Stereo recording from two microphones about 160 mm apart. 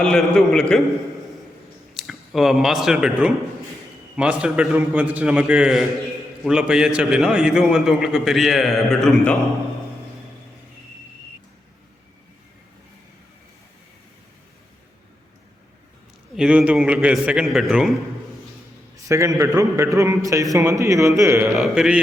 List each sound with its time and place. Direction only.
0.0 s a man's voice: 5° left (ahead or behind)
1.9 s a man's voice: centre (ahead or behind)
16.3 s a man's voice: 5° right (ahead or behind)
19.0 s a man's voice: 20° right (ahead or behind)
21.5 s a man's voice: centre (ahead or behind)